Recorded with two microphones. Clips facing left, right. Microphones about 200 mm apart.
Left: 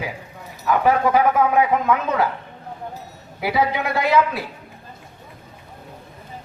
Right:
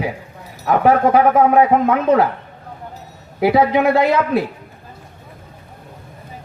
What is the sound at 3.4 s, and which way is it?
Speech, 55° right (ahead or behind).